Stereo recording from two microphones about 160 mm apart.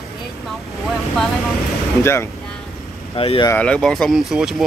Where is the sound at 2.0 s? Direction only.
15° left (ahead or behind).